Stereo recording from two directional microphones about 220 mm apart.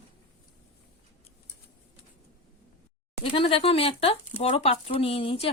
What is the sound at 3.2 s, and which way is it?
Speech, 25° left (ahead or behind).